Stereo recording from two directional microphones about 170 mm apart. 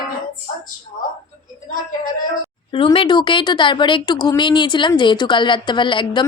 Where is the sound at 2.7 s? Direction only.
30° left (ahead or behind).